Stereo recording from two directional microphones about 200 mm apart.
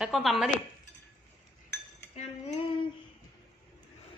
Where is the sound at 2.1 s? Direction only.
30° left (ahead or behind).